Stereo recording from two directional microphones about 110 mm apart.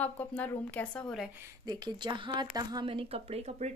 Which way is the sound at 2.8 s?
55° right (ahead or behind).